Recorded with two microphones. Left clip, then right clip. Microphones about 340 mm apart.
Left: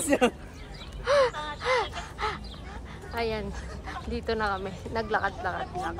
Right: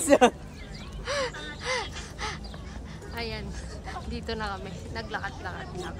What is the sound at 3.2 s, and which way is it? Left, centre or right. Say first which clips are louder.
Speech: left 5 dB; centre.